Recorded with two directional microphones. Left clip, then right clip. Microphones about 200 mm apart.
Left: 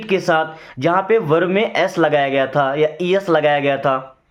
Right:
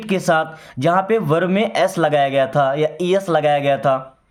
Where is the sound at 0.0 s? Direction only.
35° right (ahead or behind).